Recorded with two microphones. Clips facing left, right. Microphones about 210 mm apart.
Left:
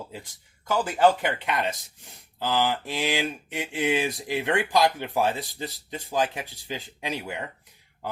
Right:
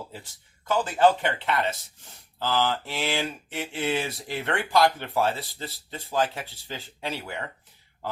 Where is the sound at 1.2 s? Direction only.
15° left (ahead or behind).